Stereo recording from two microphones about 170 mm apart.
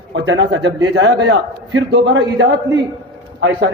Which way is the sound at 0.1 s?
90° right.